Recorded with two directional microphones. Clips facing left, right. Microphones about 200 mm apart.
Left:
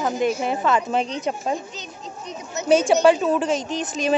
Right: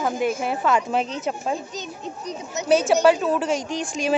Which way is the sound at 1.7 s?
45° right (ahead or behind).